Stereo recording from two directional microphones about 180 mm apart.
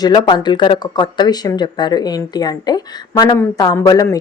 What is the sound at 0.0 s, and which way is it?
Speech, 25° left (ahead or behind).